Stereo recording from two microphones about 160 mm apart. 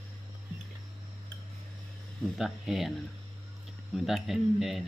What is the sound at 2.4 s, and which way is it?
Speech, centre (ahead or behind).